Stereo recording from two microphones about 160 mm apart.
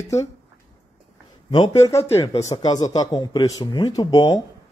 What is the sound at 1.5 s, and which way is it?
Speech, 25° left (ahead or behind).